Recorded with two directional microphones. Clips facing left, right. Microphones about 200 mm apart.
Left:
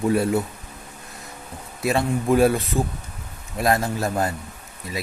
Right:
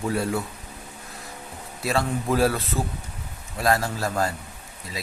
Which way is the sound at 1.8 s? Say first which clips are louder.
Left 3 dB; 20° left (ahead or behind).